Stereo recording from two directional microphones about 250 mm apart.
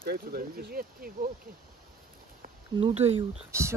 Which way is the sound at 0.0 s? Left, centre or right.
Right.